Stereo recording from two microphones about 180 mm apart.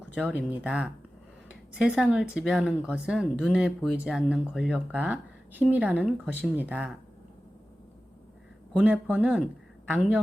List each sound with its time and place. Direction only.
0.0 s speech: 5° right (ahead or behind)
8.7 s speech: 5° right (ahead or behind)